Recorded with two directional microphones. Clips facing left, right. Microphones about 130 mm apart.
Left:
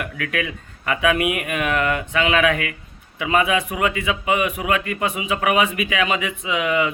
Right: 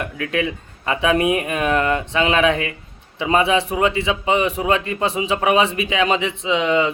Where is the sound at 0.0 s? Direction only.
25° right (ahead or behind).